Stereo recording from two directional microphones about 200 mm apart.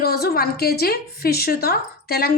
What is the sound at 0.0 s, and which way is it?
A woman's voice, 50° left (ahead or behind).